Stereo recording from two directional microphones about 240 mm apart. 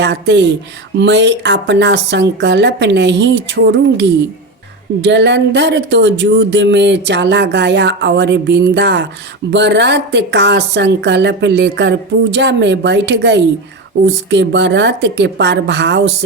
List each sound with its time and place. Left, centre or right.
0.0 s speech: right